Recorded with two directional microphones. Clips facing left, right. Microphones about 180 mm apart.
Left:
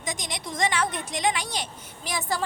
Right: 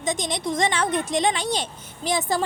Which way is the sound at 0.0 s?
25° right (ahead or behind).